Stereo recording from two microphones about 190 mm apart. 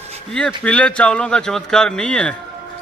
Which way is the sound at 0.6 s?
5° left (ahead or behind).